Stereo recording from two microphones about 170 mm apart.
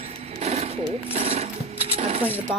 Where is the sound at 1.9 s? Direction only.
40° right (ahead or behind).